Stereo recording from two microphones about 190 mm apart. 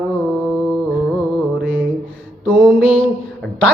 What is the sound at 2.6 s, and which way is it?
Mantra, 5° left (ahead or behind).